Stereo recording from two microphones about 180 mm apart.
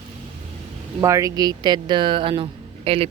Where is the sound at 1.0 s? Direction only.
20° right (ahead or behind).